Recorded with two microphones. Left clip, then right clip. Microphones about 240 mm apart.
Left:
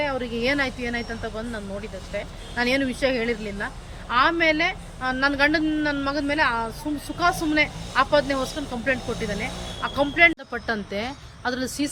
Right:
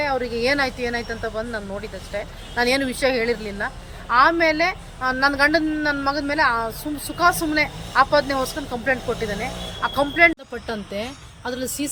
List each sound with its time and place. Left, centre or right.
0.0 s a woman's voice: centre